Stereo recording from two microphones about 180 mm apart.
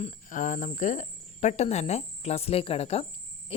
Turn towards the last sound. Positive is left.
turn(degrees=35)  # may be behind; listen again after turning